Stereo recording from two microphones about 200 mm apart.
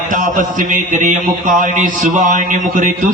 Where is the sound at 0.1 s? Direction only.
40° right (ahead or behind).